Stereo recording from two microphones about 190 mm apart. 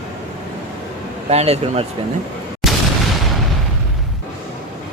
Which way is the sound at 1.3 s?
35° right (ahead or behind).